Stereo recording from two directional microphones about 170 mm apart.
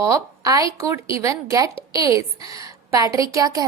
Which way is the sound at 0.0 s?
20° right (ahead or behind).